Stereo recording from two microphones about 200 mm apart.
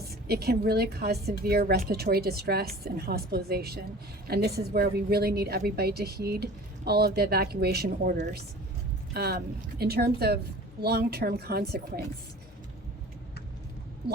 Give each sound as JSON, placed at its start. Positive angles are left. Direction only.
{"t": 0.1, "sound": "a woman's voice", "side_deg": -50}